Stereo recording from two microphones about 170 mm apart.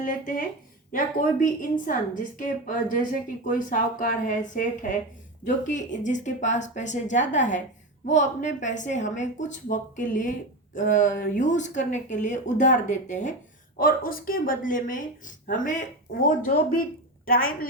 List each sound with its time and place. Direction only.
0.0 s a woman's voice: 55° left (ahead or behind)
13.7 s a woman's voice: 55° left (ahead or behind)